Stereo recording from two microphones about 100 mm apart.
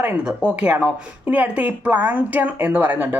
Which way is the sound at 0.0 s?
10° right (ahead or behind).